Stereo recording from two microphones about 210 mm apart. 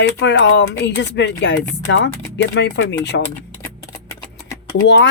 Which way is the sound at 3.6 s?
15° left (ahead or behind).